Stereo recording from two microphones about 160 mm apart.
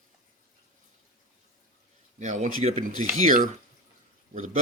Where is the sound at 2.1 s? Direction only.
50° right (ahead or behind).